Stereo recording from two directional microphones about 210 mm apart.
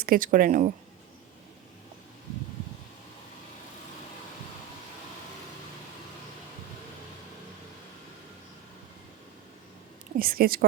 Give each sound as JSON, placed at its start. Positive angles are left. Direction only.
{"t": 0.0, "sound": "speech", "side_deg": -40}
{"t": 10.2, "sound": "speech", "side_deg": -45}